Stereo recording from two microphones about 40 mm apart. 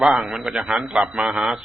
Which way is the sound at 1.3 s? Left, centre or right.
Centre.